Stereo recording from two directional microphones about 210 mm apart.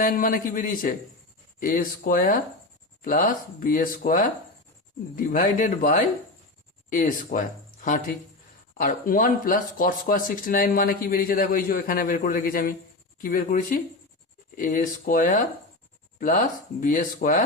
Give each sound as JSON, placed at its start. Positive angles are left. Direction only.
{"t": 0.0, "sound": "speech", "side_deg": 40}
{"t": 16.8, "sound": "speech", "side_deg": 35}